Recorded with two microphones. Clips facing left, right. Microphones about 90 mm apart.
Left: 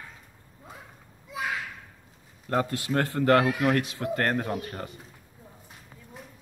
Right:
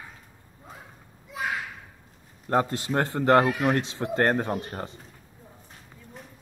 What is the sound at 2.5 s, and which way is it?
Speech, 30° right (ahead or behind).